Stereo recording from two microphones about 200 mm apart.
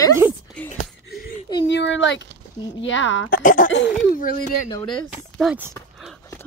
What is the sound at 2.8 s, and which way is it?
Speech, 65° left (ahead or behind).